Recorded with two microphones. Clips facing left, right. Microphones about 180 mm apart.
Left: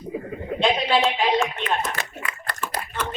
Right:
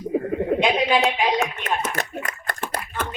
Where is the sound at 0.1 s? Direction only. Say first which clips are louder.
Right 8 dB; 55° right (ahead or behind).